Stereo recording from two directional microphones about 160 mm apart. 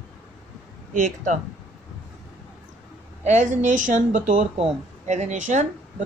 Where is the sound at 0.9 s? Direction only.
50° right (ahead or behind).